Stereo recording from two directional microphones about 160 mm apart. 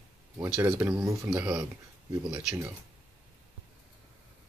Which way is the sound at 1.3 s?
5° right (ahead or behind).